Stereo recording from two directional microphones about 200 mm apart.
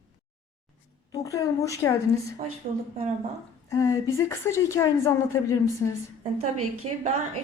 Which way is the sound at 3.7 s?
15° left (ahead or behind).